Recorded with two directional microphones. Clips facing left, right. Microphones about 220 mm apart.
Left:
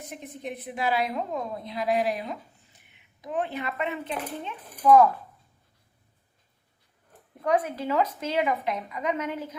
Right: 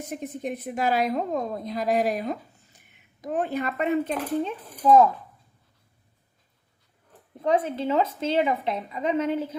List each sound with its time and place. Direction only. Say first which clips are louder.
0.1 s a woman's voice: right 5 dB; 45° right (ahead or behind)
7.4 s a woman's voice: right 2 dB; 25° right (ahead or behind)